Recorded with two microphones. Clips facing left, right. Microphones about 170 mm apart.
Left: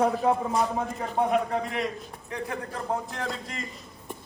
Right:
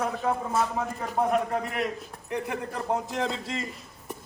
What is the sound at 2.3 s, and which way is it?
A man's voice, 15° right (ahead or behind).